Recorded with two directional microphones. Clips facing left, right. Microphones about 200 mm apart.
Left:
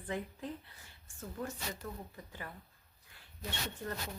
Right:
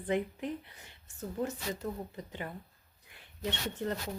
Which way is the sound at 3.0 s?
20° right (ahead or behind).